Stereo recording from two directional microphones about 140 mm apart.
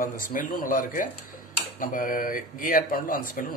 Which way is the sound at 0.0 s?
75° left (ahead or behind).